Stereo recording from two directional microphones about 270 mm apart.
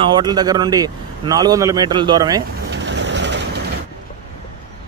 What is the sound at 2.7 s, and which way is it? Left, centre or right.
Vehicle, right.